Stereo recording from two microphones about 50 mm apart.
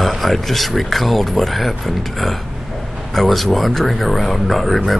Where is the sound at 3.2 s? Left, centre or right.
Centre.